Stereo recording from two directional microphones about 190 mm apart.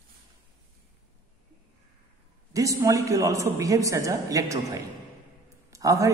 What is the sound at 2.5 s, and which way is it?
A woman's voice, 15° right (ahead or behind).